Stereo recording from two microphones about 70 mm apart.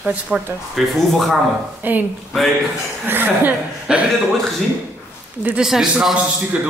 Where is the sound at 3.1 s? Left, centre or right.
Right.